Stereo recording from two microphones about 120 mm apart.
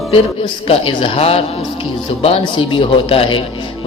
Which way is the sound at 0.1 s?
50° left (ahead or behind).